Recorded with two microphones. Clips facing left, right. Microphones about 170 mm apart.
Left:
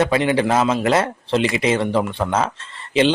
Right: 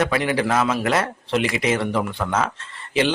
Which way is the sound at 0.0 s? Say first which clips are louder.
Left 3 dB; 25° left (ahead or behind).